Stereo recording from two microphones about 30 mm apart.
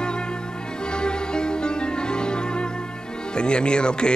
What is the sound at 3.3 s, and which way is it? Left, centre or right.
Speech, left.